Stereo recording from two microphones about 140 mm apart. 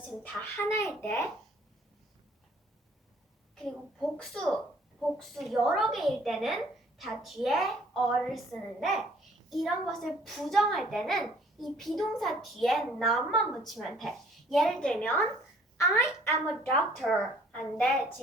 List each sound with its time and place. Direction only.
0.1 s a child's voice: 5° left (ahead or behind)
0.7 s a woman's voice: 20° left (ahead or behind)
4.2 s a child's voice: 5° left (ahead or behind)
15.8 s a woman's voice: 20° left (ahead or behind)
16.7 s a child's voice: 5° left (ahead or behind)